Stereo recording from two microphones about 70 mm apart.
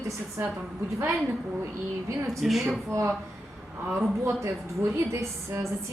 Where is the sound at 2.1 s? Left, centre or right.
Right.